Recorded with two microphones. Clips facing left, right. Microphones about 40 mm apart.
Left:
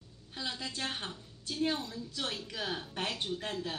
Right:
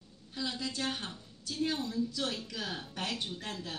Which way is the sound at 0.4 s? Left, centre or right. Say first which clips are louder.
Right 2 dB; left.